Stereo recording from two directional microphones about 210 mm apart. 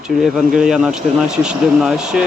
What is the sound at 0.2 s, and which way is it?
Speech, centre (ahead or behind).